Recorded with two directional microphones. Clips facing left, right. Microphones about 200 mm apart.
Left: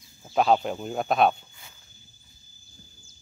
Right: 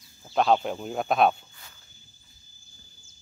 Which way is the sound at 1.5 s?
15° left (ahead or behind).